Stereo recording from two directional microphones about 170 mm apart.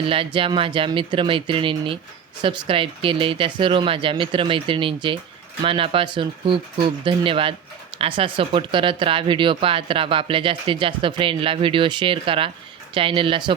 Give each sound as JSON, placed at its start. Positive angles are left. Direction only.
{"t": 0.0, "sound": "speech", "side_deg": -30}